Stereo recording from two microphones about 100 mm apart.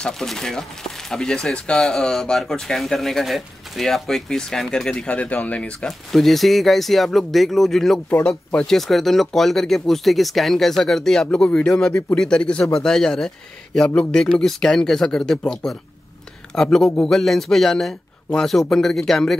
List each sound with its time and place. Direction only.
0.0 s speech: 5° left (ahead or behind)